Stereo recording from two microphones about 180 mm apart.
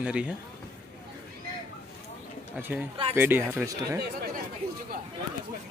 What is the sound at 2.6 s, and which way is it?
Speech, 10° right (ahead or behind).